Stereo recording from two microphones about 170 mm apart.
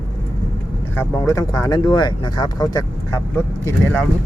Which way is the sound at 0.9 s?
15° left (ahead or behind).